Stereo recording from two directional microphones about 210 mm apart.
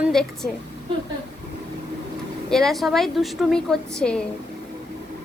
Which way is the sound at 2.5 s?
Centre (ahead or behind).